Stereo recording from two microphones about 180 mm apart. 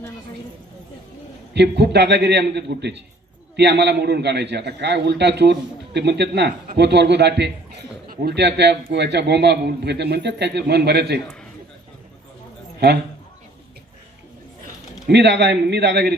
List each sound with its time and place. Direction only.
1.5 s a man's voice: 70° right (ahead or behind)
8.0 s a man's voice: 55° right (ahead or behind)
15.1 s a man's voice: 70° right (ahead or behind)